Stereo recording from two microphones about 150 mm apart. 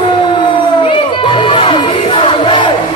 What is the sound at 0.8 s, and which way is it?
Music, 35° left (ahead or behind).